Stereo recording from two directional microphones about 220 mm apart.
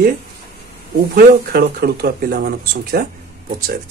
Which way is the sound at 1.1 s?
40° right (ahead or behind).